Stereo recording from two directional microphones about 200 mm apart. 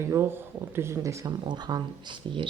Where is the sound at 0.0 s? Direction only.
10° right (ahead or behind).